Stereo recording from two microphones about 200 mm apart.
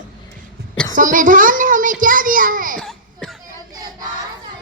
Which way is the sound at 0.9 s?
40° right (ahead or behind).